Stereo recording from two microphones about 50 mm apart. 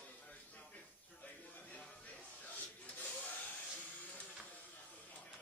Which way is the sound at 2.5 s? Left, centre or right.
Left.